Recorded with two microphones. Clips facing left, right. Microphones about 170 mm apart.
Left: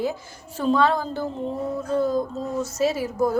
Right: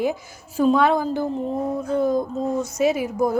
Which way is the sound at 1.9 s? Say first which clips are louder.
Right 1 dB; 20° right (ahead or behind).